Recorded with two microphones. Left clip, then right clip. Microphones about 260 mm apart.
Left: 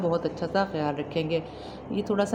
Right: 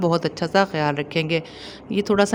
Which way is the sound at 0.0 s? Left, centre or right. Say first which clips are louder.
Right 5 dB; right.